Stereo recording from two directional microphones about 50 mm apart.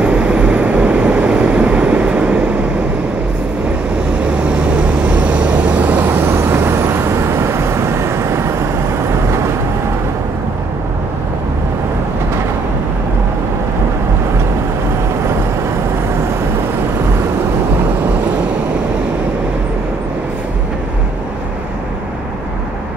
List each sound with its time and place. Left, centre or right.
0.0 s vehicle: right
4.4 s vehicle: right
6.2 s vehicle: right